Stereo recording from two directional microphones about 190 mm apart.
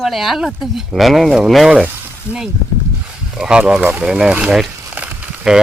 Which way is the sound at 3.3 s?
5° right (ahead or behind).